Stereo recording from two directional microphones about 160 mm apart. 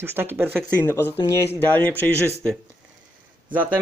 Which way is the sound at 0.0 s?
15° right (ahead or behind).